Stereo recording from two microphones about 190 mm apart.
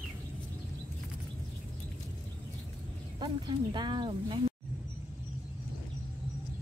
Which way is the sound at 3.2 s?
25° right (ahead or behind).